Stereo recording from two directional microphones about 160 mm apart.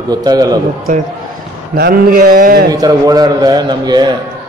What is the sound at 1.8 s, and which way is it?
Speech, 65° right (ahead or behind).